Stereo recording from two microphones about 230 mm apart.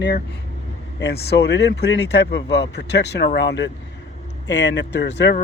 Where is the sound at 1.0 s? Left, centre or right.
Left.